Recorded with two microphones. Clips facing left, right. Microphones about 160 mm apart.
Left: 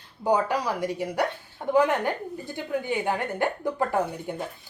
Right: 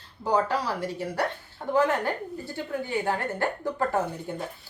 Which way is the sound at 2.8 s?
15° left (ahead or behind).